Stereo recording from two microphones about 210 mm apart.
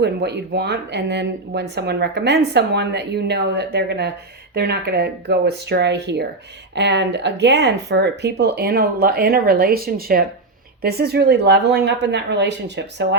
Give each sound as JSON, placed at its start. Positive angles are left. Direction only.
{"t": 0.0, "sound": "speech", "side_deg": -50}